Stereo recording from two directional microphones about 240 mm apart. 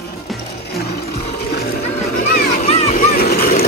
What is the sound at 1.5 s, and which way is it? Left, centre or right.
Music, left.